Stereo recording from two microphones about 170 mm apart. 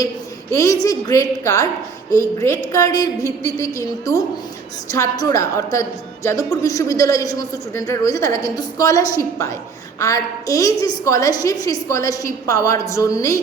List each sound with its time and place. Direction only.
0.5 s a woman's voice: 20° left (ahead or behind)